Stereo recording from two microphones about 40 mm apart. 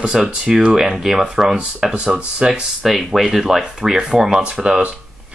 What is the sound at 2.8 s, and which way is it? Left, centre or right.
Speech, centre.